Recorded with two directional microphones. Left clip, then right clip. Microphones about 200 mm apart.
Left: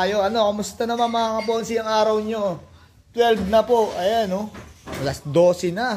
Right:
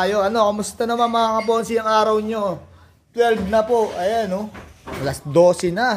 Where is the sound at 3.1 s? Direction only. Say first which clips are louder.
Even; 5° left (ahead or behind); by 5.9 s 10° right (ahead or behind).